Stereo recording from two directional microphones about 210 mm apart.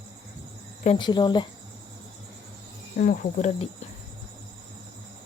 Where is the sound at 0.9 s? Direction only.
20° left (ahead or behind).